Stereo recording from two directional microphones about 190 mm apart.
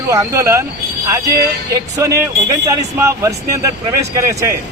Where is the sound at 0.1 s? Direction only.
15° right (ahead or behind).